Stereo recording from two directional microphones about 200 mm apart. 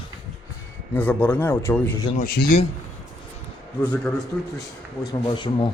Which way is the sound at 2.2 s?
45° left (ahead or behind).